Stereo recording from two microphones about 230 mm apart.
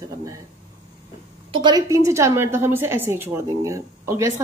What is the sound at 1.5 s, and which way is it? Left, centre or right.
A woman's voice, centre.